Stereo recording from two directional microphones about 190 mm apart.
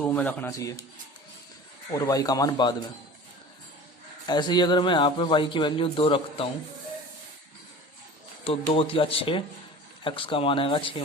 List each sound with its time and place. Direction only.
0.0 s speech: 10° left (ahead or behind)
1.9 s a man's voice: 20° left (ahead or behind)
4.3 s a man's voice: 25° left (ahead or behind)
8.4 s a man's voice: 30° left (ahead or behind)